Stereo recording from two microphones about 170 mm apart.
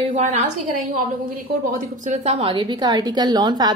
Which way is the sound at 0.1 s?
45° right (ahead or behind).